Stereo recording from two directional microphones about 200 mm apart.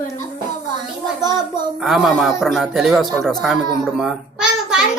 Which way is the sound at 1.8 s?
Centre (ahead or behind).